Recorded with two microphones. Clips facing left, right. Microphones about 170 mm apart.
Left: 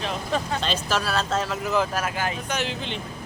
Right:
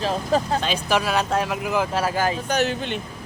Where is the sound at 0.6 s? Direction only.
15° right (ahead or behind).